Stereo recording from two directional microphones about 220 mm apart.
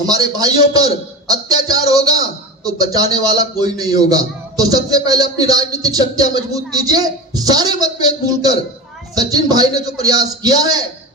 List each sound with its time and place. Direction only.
0.0 s a man's voice: 15° right (ahead or behind)